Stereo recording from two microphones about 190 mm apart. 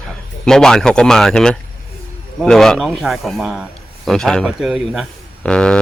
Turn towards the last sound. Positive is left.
turn(degrees=5)  # may be behind; listen again after turning